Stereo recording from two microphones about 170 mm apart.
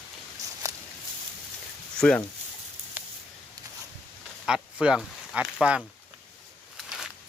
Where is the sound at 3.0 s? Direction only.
10° right (ahead or behind).